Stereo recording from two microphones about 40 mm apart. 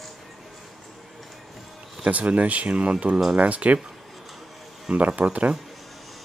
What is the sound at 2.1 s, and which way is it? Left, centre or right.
Speech, right.